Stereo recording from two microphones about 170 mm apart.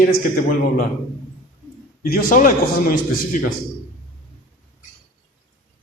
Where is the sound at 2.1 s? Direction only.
50° left (ahead or behind).